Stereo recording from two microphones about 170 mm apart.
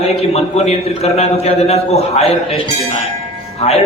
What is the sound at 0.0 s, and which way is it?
A man's voice, 40° left (ahead or behind).